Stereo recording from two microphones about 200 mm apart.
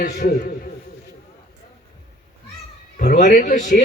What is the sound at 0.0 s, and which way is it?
Speech, 50° left (ahead or behind).